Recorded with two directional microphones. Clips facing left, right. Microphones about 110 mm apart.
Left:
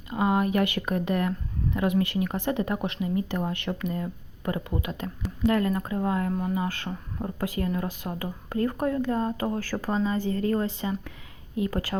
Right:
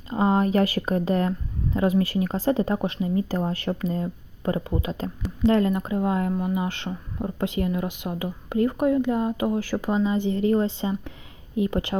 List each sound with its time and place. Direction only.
0.1 s speech: 30° right (ahead or behind)